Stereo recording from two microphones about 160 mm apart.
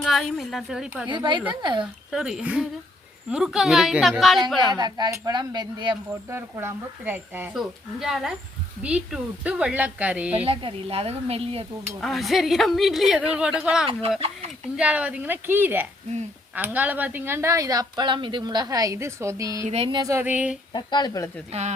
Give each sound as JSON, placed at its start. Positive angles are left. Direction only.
{"t": 0.0, "sound": "a woman's voice", "side_deg": 0}
{"t": 1.0, "sound": "speech", "side_deg": -30}
{"t": 1.8, "sound": "a woman's voice", "side_deg": -5}
{"t": 4.7, "sound": "speech", "side_deg": -25}
{"t": 6.3, "sound": "speech", "side_deg": -15}
{"t": 7.5, "sound": "a woman's voice", "side_deg": 0}
{"t": 10.3, "sound": "speech", "side_deg": -35}
{"t": 11.9, "sound": "a woman's voice", "side_deg": 0}
{"t": 14.2, "sound": "speech", "side_deg": -40}
{"t": 14.8, "sound": "speech", "side_deg": -10}
{"t": 19.6, "sound": "speech", "side_deg": -40}
{"t": 20.0, "sound": "speech", "side_deg": -20}
{"t": 20.7, "sound": "speech", "side_deg": 25}